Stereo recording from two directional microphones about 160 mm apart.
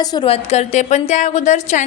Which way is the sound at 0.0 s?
25° left (ahead or behind).